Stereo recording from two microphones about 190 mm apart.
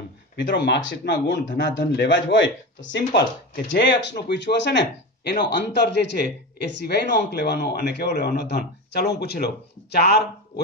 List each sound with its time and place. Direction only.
0.4 s speech: 65° left (ahead or behind)